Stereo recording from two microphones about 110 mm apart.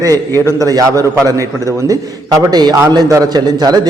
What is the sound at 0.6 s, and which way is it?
A man's voice, 30° right (ahead or behind).